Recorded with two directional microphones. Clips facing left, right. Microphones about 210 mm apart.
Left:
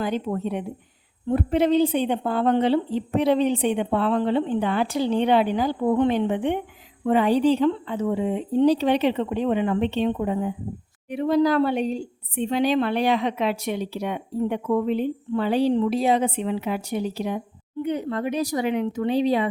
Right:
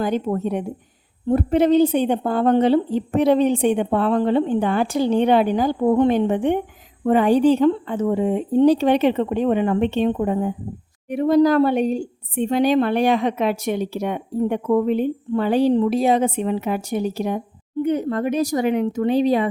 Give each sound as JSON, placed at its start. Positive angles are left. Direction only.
{"t": 0.0, "sound": "a woman's voice", "side_deg": -45}